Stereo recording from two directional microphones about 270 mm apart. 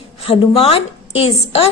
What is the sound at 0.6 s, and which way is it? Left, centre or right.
A woman's voice, left.